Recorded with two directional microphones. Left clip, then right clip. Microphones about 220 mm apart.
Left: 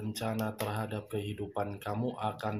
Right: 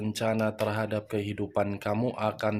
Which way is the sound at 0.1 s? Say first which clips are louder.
Right 8 dB; 45° right (ahead or behind).